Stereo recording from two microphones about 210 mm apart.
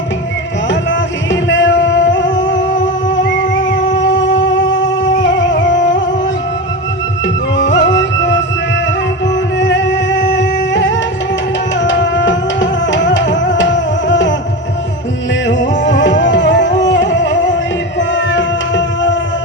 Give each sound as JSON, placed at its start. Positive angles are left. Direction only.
{"t": 0.7, "sound": "music", "side_deg": 60}
{"t": 7.5, "sound": "music", "side_deg": 60}
{"t": 9.6, "sound": "music", "side_deg": 60}
{"t": 15.4, "sound": "music", "side_deg": 55}
{"t": 18.1, "sound": "cat", "side_deg": 60}